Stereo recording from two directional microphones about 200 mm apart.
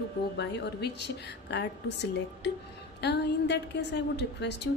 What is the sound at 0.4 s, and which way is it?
Speech, 55° left (ahead or behind).